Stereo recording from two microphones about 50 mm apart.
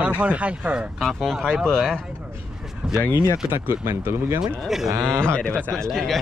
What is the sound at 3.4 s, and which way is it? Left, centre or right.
Speech, right.